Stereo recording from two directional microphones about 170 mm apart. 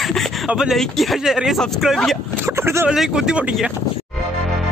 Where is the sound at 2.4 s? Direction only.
15° right (ahead or behind).